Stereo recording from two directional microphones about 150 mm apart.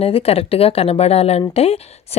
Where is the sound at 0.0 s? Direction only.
40° left (ahead or behind).